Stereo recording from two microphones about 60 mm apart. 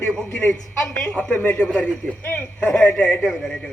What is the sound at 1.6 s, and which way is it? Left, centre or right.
A man's voice, centre.